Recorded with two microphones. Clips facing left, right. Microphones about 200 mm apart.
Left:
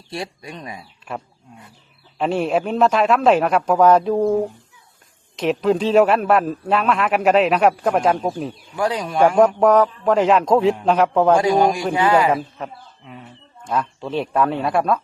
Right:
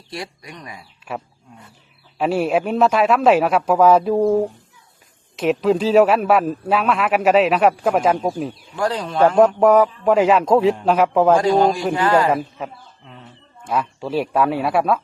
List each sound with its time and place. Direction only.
0.1 s speech: 25° left (ahead or behind)
2.1 s a man's voice: 5° right (ahead or behind); by 9.3 s 10° left (ahead or behind)
9.6 s a man's voice: 10° right (ahead or behind)
11.3 s a man's voice: 10° left (ahead or behind)
12.3 s a man's voice: 5° right (ahead or behind)